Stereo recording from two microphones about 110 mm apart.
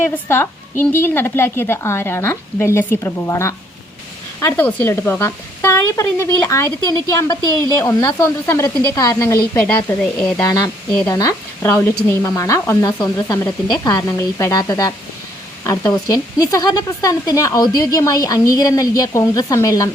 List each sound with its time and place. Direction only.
0.0 s a woman's voice: 20° left (ahead or behind)
4.5 s a woman's voice: 15° left (ahead or behind)
10.0 s speech: 10° left (ahead or behind)
11.1 s speech: 30° left (ahead or behind)